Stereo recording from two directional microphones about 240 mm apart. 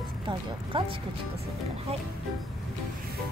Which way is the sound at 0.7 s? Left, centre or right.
Right.